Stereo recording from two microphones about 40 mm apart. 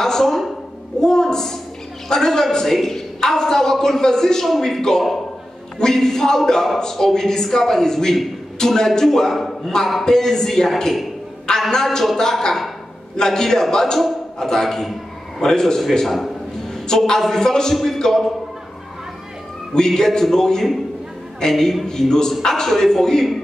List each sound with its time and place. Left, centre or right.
0.0 s a sound: centre
2.0 s a woman's voice: centre
16.8 s a woman's voice: centre
19.7 s a woman's voice: centre